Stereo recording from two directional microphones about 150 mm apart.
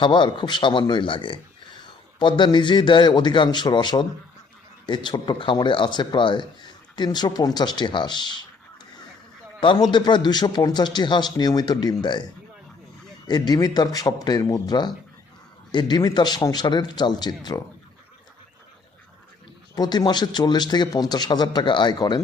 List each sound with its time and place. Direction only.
0.0 s speech: 35° left (ahead or behind)
9.6 s a man's voice: 30° left (ahead or behind)
13.2 s speech: 30° left (ahead or behind)
19.7 s speech: 25° left (ahead or behind)